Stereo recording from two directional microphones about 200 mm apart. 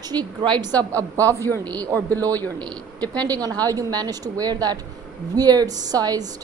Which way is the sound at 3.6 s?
20° right (ahead or behind).